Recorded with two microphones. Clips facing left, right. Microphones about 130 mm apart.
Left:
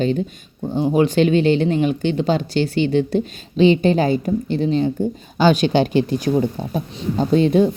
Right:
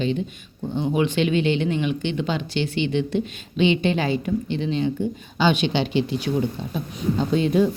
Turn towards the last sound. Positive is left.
turn(degrees=30)  # may be behind; listen again after turning